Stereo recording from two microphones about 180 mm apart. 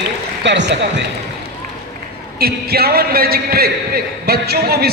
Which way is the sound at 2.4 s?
60° right (ahead or behind).